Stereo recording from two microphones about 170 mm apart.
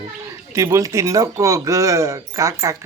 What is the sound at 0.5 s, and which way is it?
Speech, 20° right (ahead or behind).